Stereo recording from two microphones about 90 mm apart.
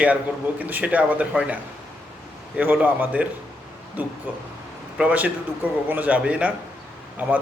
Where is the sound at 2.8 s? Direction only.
15° right (ahead or behind).